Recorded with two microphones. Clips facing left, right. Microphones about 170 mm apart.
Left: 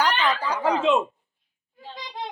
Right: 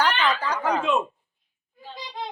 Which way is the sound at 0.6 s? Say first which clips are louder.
Left 4 dB; 25° left (ahead or behind).